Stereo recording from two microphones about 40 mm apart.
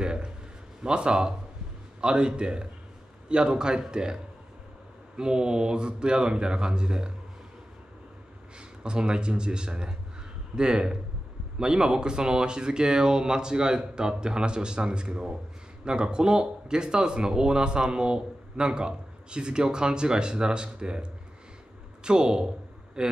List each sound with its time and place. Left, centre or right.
0.0 s a sound: right
0.8 s speech: right
8.5 s a man's voice: right